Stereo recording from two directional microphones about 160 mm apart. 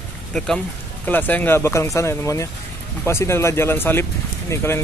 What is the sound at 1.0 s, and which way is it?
Speech, 10° left (ahead or behind).